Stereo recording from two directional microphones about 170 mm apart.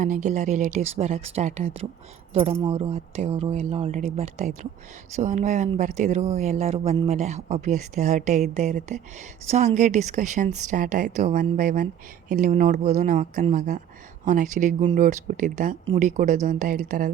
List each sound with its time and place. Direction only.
0.0 s a woman's voice: 45° right (ahead or behind)